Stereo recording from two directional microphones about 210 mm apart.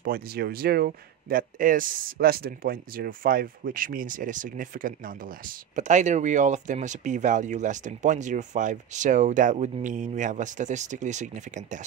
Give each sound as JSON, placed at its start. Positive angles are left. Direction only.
{"t": 0.0, "sound": "speech", "side_deg": -45}